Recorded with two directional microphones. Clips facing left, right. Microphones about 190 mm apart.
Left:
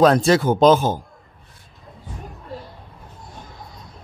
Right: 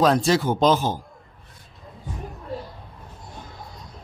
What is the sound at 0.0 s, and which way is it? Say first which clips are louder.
Speech: left 4 dB; 60° left (ahead or behind).